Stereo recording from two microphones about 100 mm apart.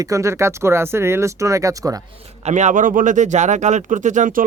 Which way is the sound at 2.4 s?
90° right.